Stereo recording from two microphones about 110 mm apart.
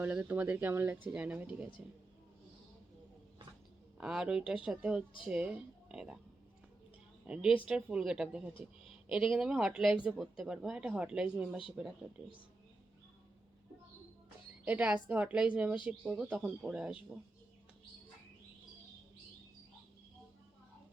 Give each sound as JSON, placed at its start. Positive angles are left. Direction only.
{"t": 0.0, "sound": "speech", "side_deg": -15}
{"t": 3.9, "sound": "speech", "side_deg": -5}
{"t": 7.3, "sound": "speech", "side_deg": -10}
{"t": 14.7, "sound": "speech", "side_deg": -15}